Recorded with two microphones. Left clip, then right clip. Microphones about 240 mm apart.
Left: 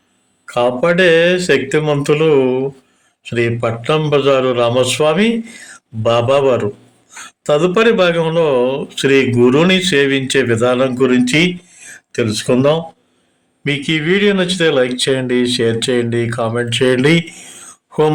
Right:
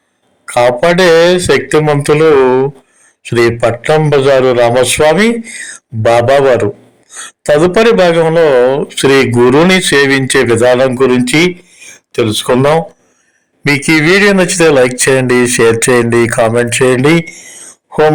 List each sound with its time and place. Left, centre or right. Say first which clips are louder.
0.4 s a man's voice: right 5 dB; right
13.7 s a man's voice: right 8 dB; right